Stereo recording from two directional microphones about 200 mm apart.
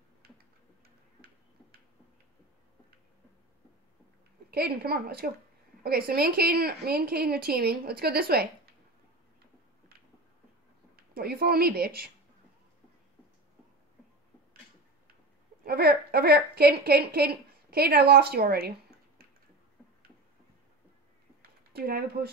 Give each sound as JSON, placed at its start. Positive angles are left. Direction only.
{"t": 0.8, "sound": "tick-tock", "side_deg": -50}
{"t": 4.5, "sound": "a woman's voice", "side_deg": -50}
{"t": 11.1, "sound": "a woman's voice", "side_deg": -50}
{"t": 15.6, "sound": "a woman's voice", "side_deg": -50}
{"t": 21.4, "sound": "a sound", "side_deg": -50}